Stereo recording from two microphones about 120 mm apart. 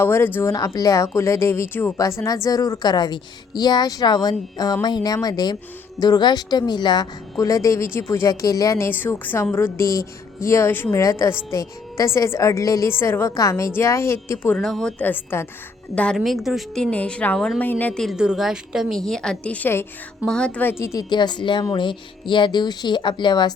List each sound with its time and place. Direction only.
0.0 s a woman's voice: 20° left (ahead or behind)
0.5 s a woman's voice: 30° left (ahead or behind)
14.5 s a woman's voice: 5° left (ahead or behind)
16.0 s a woman's voice: 5° left (ahead or behind); by 23.6 s 40° left (ahead or behind)